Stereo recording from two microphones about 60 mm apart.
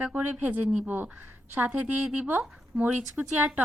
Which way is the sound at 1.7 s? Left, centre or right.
Right.